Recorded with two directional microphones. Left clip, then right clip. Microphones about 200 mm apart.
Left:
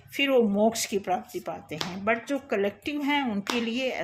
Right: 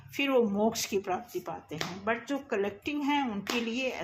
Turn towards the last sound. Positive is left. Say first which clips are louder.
# left 3 dB
turn(degrees=20)  # may be behind; listen again after turning